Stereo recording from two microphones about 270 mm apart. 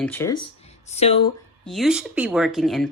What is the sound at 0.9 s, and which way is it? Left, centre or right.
Speech, left.